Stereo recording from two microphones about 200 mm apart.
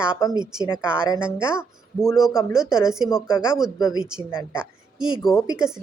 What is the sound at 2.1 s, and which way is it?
A woman's voice, centre (ahead or behind).